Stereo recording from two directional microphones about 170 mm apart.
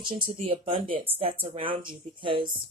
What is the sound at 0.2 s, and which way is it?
A woman's voice, 30° right (ahead or behind).